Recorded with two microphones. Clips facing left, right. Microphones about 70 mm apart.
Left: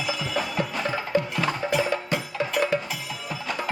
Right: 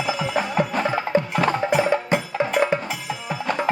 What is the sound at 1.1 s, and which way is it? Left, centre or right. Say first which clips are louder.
Music: right 4 dB; centre.